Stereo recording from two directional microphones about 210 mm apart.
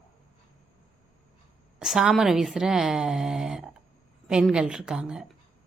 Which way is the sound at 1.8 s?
Centre (ahead or behind).